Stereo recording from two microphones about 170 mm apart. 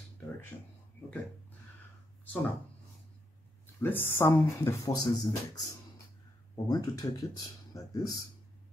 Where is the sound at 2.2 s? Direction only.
10° left (ahead or behind).